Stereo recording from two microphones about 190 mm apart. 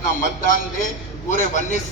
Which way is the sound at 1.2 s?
40° left (ahead or behind).